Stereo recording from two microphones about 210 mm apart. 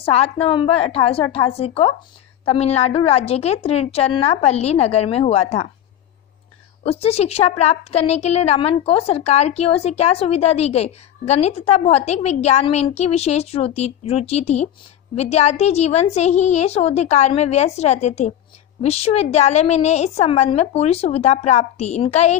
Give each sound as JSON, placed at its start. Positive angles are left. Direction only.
{"t": 0.0, "sound": "a woman's voice", "side_deg": 30}
{"t": 6.8, "sound": "a woman's voice", "side_deg": 30}